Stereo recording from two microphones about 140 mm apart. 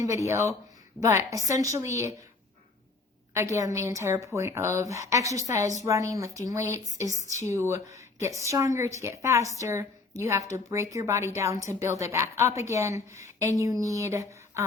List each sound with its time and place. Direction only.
0.0 s a woman's voice: 20° right (ahead or behind)
3.3 s a woman's voice: 20° right (ahead or behind)